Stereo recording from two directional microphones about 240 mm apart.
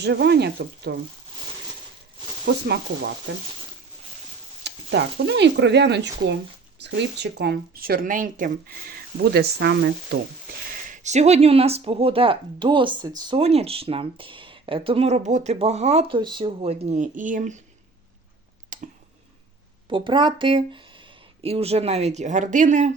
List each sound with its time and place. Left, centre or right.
0.0 s speech: right
4.6 s speech: right
10.7 s speech: right
18.7 s clicking: right
19.9 s speech: centre